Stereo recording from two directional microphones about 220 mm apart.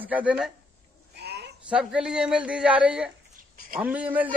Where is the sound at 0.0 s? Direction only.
5° right (ahead or behind).